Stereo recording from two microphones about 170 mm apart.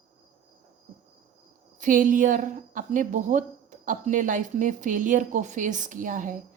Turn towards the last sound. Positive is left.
turn(degrees=-50)  # may be behind; listen again after turning